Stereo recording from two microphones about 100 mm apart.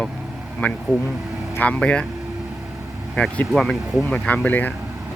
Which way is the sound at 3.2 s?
5° left (ahead or behind).